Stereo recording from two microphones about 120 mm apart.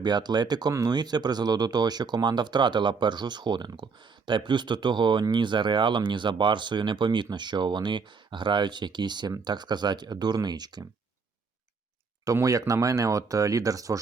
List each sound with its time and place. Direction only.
0.0 s speech: 35° right (ahead or behind)
12.2 s speech: 30° right (ahead or behind)